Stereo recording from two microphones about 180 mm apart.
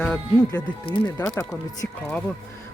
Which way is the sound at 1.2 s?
20° left (ahead or behind).